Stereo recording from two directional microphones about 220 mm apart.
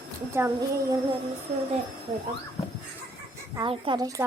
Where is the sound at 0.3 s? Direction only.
10° right (ahead or behind).